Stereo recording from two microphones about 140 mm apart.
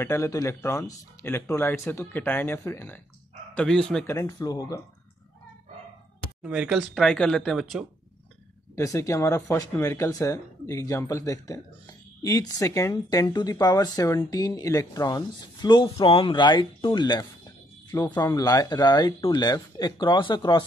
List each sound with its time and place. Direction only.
0.0 s speech: 20° left (ahead or behind)
3.5 s speech: 5° left (ahead or behind)
4.0 s speech: 20° left (ahead or behind)
6.4 s speech: 5° right (ahead or behind)
7.0 s speech: 5° left (ahead or behind)
8.7 s speech: 20° left (ahead or behind)